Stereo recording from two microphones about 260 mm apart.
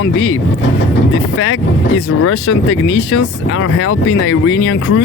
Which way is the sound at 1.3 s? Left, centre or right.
Left.